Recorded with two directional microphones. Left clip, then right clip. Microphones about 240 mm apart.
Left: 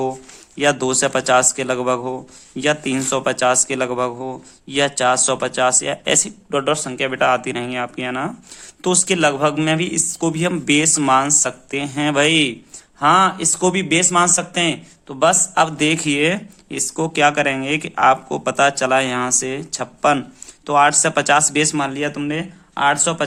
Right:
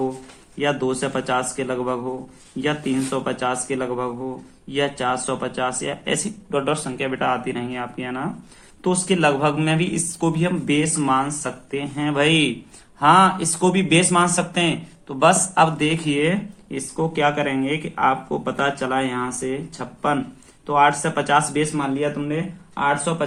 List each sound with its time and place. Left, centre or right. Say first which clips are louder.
0.5 s speech: left 5 dB; left